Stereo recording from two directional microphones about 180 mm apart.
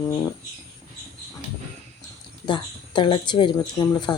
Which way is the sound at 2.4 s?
25° left (ahead or behind).